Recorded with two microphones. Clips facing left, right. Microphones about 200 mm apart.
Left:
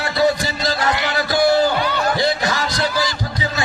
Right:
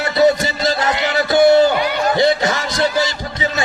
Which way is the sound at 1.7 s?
10° right (ahead or behind).